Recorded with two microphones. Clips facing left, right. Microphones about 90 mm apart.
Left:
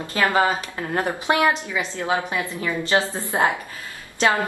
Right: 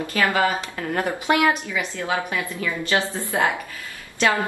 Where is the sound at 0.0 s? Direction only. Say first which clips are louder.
Left 1 dB; 25° left (ahead or behind).